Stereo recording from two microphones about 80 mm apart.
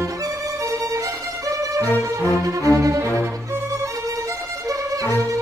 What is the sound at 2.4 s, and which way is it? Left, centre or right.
Music, right.